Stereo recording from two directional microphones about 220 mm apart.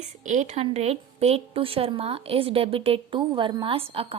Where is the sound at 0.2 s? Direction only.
35° right (ahead or behind).